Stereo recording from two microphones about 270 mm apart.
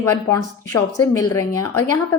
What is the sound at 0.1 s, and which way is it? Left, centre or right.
A woman's voice, centre.